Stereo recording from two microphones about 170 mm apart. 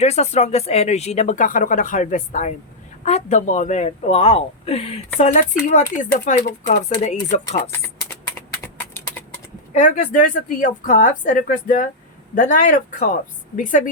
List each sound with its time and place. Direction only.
0.0 s speech: 40° left (ahead or behind)
8.4 s a sound: 10° left (ahead or behind)
9.7 s speech: 45° left (ahead or behind)